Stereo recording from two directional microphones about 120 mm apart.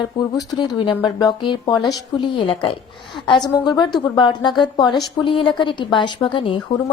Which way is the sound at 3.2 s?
40° left (ahead or behind).